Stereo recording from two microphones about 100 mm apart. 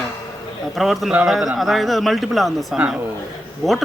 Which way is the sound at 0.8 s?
Centre (ahead or behind).